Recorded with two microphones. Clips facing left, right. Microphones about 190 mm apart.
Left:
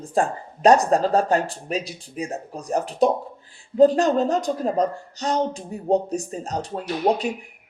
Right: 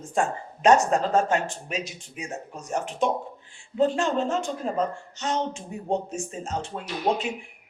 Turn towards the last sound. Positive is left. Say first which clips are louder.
# left 4 dB
turn(degrees=40)  # may be behind; listen again after turning